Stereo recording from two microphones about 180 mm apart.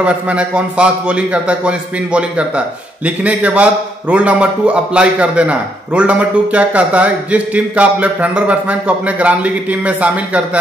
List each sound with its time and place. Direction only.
0.0 s a man's voice: 5° right (ahead or behind)